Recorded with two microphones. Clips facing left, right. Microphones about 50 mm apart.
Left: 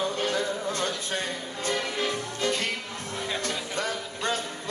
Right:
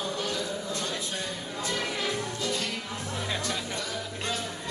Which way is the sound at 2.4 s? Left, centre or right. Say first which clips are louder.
Left 3 dB; left.